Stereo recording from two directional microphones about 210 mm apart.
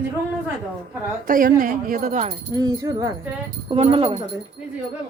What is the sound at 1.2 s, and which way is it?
Speech, 40° right (ahead or behind).